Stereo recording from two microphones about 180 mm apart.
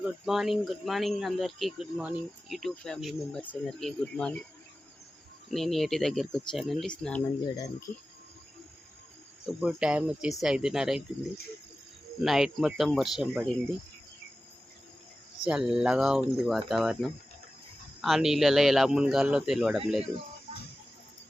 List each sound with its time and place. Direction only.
0.0 s speech: centre (ahead or behind)
5.5 s speech: centre (ahead or behind)
7.5 s speech: 20° left (ahead or behind)
9.5 s speech: 5° right (ahead or behind)
12.2 s speech: centre (ahead or behind)
15.4 s speech: 5° right (ahead or behind)